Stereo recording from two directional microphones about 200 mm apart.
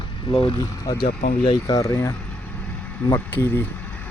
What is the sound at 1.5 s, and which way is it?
Speech, 15° left (ahead or behind).